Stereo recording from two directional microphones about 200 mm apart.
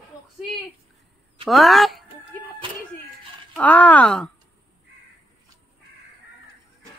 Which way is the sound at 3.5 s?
5° left (ahead or behind).